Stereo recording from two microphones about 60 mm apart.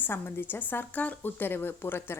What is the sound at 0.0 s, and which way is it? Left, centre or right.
A woman's voice, left.